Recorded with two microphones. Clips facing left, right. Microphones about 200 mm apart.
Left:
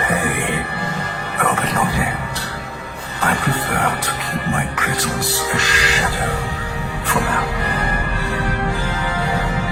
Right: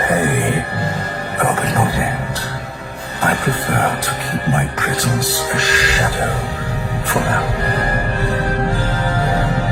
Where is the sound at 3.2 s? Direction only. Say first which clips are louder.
Right 2 dB; 35° right (ahead or behind).